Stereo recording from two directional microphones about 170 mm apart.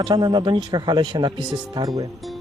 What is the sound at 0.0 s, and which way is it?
Speech, 25° right (ahead or behind).